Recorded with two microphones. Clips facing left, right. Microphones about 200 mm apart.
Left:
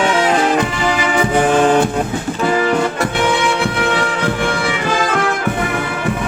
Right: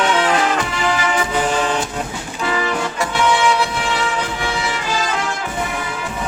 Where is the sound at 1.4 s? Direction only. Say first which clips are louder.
Left 11 dB; 50° left (ahead or behind).